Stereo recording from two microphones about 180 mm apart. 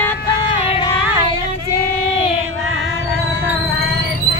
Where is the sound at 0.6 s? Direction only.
30° left (ahead or behind).